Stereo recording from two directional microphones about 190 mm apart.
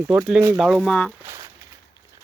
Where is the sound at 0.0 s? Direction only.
15° right (ahead or behind).